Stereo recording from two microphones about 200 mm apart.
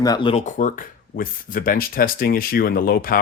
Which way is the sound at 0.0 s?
20° left (ahead or behind).